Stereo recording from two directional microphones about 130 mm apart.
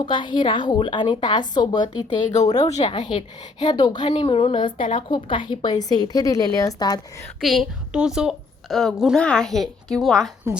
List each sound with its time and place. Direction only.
0.0 s a woman's voice: 35° left (ahead or behind)
2.6 s speech: 60° left (ahead or behind)
2.9 s a woman's voice: 35° left (ahead or behind)
7.4 s a woman's voice: centre (ahead or behind)